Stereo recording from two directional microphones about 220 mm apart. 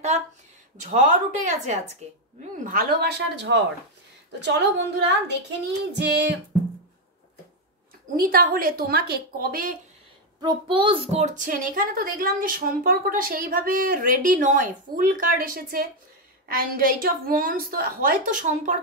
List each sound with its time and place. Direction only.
0.7 s a child's voice: 35° right (ahead or behind); by 6.3 s 50° right (ahead or behind)
8.2 s a child's voice: 40° right (ahead or behind)
10.4 s a child's voice: 20° right (ahead or behind); by 18.8 s 35° right (ahead or behind)